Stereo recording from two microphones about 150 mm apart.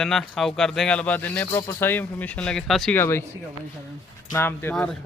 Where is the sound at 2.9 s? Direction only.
15° left (ahead or behind).